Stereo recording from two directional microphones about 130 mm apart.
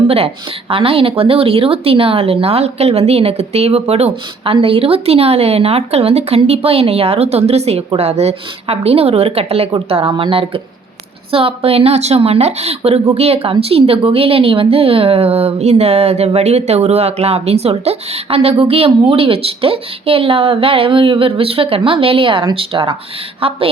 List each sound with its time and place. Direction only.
0.7 s a woman's voice: 45° right (ahead or behind)